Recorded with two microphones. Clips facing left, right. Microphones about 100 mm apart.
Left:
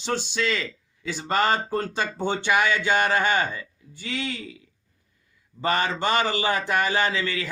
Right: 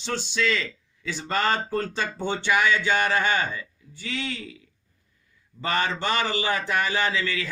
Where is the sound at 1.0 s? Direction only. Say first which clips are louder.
Left 2 dB; 20° left (ahead or behind).